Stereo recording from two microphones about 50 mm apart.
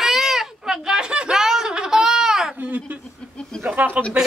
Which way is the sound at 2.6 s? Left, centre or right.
Right.